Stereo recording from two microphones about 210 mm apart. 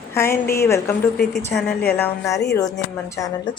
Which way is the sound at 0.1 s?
10° left (ahead or behind).